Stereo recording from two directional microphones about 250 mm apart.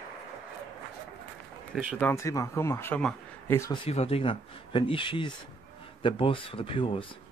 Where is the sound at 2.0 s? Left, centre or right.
Centre.